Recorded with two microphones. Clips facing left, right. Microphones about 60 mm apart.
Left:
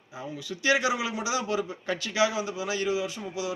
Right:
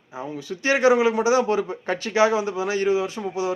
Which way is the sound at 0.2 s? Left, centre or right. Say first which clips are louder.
Right 5 dB; right.